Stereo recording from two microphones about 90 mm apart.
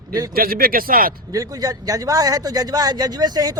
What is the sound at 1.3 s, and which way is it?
A woman's voice, 40° right (ahead or behind).